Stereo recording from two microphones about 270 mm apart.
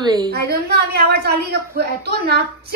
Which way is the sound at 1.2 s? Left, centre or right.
Right.